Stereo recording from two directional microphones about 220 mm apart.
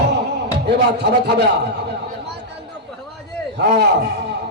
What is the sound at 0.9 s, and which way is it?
Speech, 50° right (ahead or behind).